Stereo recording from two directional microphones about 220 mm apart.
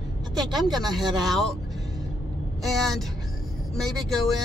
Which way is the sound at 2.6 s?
Centre (ahead or behind).